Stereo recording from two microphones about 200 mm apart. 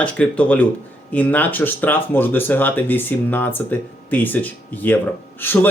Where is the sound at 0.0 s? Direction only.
5° left (ahead or behind).